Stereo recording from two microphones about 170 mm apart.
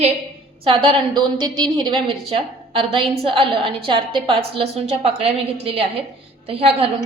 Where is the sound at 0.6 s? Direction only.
30° right (ahead or behind).